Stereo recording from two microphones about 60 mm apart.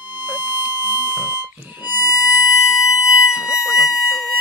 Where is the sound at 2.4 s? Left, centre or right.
Centre.